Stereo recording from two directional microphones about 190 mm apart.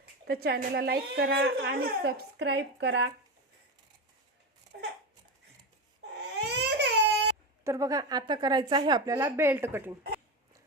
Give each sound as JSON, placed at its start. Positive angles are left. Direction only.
{"t": 0.3, "sound": "a woman's voice", "side_deg": -55}
{"t": 4.7, "sound": "a sound", "side_deg": -55}
{"t": 6.1, "sound": "baby cry", "side_deg": -60}
{"t": 7.6, "sound": "a woman's voice", "side_deg": -15}